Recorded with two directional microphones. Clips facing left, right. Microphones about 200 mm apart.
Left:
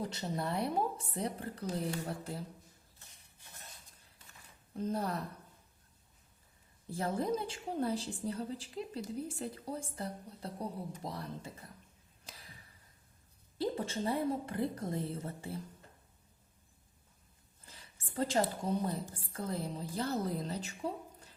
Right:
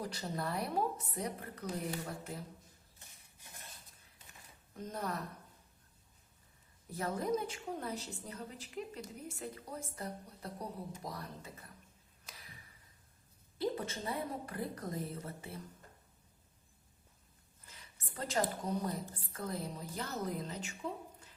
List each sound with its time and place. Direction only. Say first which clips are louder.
0.0 s a woman's voice: left 2 dB; 25° left (ahead or behind)
4.8 s a woman's voice: left 5 dB; 30° left (ahead or behind)
6.9 s a woman's voice: left 1 dB; 30° left (ahead or behind)
13.6 s a woman's voice: left 2 dB; 30° left (ahead or behind)
17.7 s a sound: left 1 dB; 30° left (ahead or behind)
19.3 s a woman's voice: left 3 dB; 30° left (ahead or behind)